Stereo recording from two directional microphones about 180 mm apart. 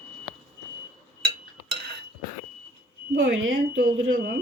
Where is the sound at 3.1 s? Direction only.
90° right.